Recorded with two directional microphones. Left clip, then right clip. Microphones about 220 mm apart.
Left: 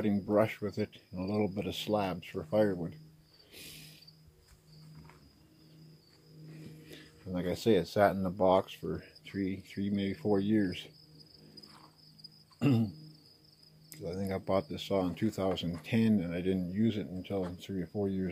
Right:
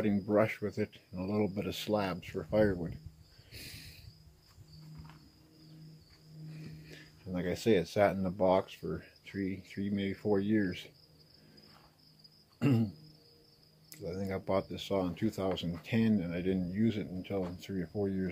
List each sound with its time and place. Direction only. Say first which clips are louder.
0.0 s speech: even; centre (ahead or behind)
6.9 s speech: left 2 dB; 10° left (ahead or behind)
12.5 s cricket: left 1 dB; 5° left (ahead or behind)
13.8 s speech: left 1 dB; 10° left (ahead or behind)